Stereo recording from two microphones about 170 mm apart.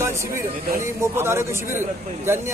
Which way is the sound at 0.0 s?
15° right (ahead or behind).